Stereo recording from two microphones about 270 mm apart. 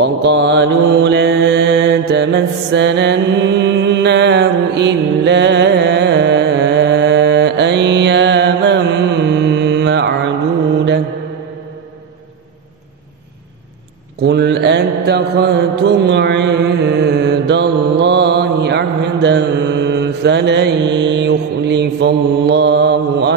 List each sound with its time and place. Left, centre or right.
0.0 s mantra: right
14.2 s mantra: right